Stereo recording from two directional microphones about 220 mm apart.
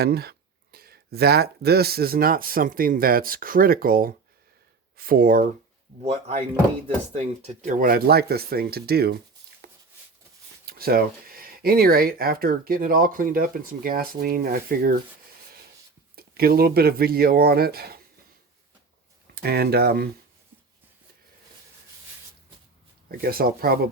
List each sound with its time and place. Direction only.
0.0 s speech: 45° right (ahead or behind)
6.0 s speech: 30° right (ahead or behind); by 9.1 s 45° right (ahead or behind)
9.6 s a sound: 40° right (ahead or behind)
10.7 s speech: 45° right (ahead or behind)
16.1 s speech: 45° right (ahead or behind)
19.3 s speech: 45° right (ahead or behind)
23.2 s speech: 45° right (ahead or behind)